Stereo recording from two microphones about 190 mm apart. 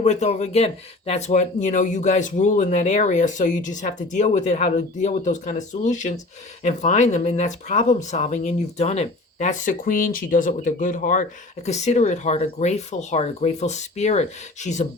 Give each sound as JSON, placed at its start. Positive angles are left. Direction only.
{"t": 0.0, "sound": "speech", "side_deg": 35}